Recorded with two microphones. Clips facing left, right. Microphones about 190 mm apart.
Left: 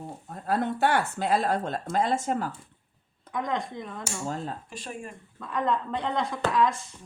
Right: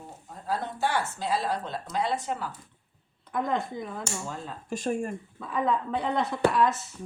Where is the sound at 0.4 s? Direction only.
60° left (ahead or behind).